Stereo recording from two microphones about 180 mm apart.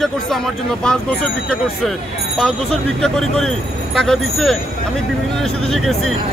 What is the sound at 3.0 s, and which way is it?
A man's voice, centre (ahead or behind).